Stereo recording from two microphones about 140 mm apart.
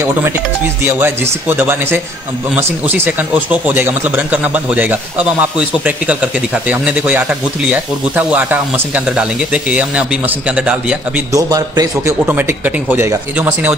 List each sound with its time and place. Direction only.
0.8 s speech: 15° right (ahead or behind)
11.3 s a man's voice: 25° right (ahead or behind)
12.3 s speech: 15° right (ahead or behind)